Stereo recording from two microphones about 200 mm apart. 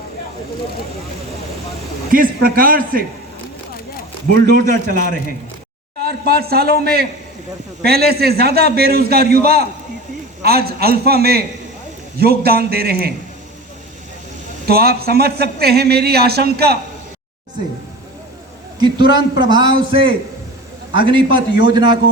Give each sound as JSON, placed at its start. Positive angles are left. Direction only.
{"t": 2.1, "sound": "a man's voice", "side_deg": -45}
{"t": 4.4, "sound": "a man's voice", "side_deg": -40}
{"t": 6.0, "sound": "a man's voice", "side_deg": -50}
{"t": 14.7, "sound": "a man's voice", "side_deg": -50}
{"t": 18.8, "sound": "a man's voice", "side_deg": -20}
{"t": 20.9, "sound": "a man's voice", "side_deg": -25}